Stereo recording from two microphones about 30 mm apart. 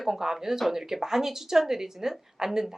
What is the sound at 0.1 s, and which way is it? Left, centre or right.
Speech, centre.